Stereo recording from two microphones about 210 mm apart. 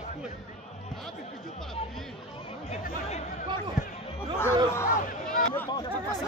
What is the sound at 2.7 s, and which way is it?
Chatter, 30° left (ahead or behind).